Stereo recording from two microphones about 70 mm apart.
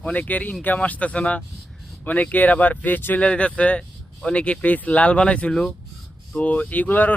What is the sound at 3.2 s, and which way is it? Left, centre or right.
Speech, centre.